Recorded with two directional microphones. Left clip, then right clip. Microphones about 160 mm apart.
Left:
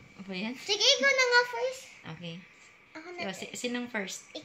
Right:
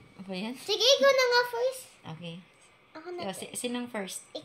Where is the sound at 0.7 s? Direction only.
45° right (ahead or behind).